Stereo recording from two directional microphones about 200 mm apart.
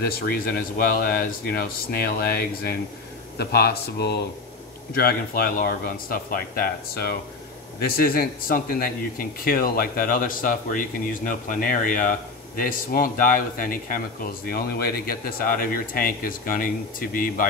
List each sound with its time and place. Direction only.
0.0 s speech: 45° left (ahead or behind)